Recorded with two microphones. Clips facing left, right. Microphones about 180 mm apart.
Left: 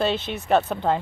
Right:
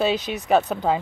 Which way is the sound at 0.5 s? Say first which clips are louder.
Right 1 dB; 5° right (ahead or behind).